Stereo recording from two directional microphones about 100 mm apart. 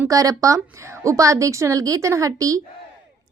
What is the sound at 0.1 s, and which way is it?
A woman's voice, 35° right (ahead or behind).